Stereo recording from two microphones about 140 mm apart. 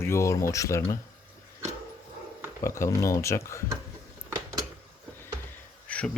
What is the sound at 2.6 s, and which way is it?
Speech, 20° left (ahead or behind).